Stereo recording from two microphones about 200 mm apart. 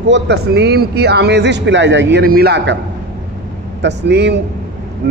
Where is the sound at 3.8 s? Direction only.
60° right (ahead or behind).